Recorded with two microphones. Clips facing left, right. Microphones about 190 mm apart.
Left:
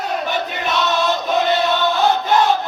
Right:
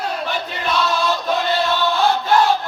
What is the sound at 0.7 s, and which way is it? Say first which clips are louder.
Chant: even; 20° left (ahead or behind).